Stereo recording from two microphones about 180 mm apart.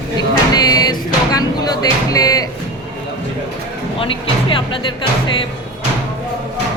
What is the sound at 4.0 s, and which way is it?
Speech, 30° left (ahead or behind).